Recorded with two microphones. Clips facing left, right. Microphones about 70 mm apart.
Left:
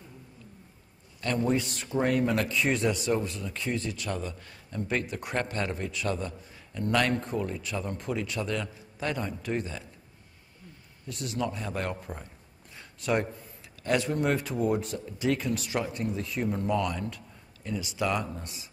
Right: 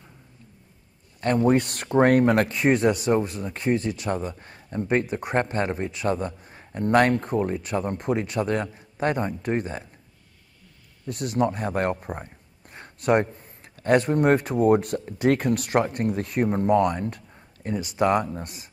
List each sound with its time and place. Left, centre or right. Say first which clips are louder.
1.2 s speech: right 7 dB; right
11.1 s speech: right 8 dB; right